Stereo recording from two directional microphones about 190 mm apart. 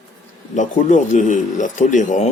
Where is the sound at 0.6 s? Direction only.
40° left (ahead or behind).